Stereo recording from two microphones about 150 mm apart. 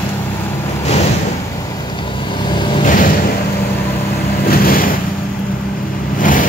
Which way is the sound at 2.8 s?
65° left (ahead or behind).